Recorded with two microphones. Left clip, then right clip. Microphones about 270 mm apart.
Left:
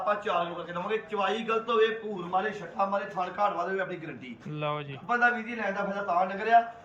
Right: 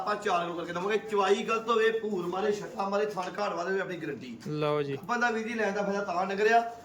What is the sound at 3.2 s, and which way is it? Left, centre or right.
Speech, centre.